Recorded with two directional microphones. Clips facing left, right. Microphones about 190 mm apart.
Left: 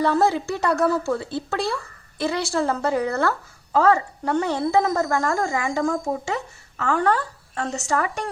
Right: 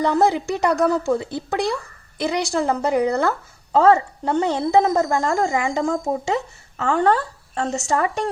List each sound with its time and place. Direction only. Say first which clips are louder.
0.0 s speech: right 2 dB; 15° right (ahead or behind)